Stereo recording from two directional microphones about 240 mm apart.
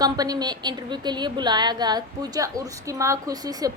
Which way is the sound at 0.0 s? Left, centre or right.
Centre.